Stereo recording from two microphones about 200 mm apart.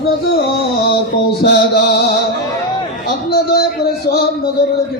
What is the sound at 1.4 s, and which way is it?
Music, 50° left (ahead or behind).